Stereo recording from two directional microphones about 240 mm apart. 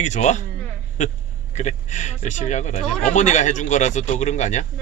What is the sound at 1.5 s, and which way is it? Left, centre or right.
Speech, left.